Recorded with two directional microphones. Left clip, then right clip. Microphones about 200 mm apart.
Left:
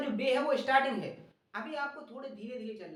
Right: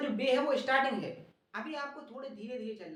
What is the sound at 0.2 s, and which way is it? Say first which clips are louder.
A woman's voice: even; 10° right (ahead or behind).